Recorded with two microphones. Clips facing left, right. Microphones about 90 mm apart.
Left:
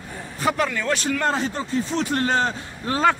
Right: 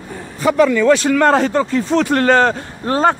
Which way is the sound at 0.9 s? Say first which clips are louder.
Right 10 dB; 75° right (ahead or behind).